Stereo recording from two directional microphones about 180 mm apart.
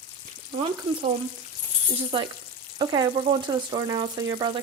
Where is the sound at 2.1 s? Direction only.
30° right (ahead or behind).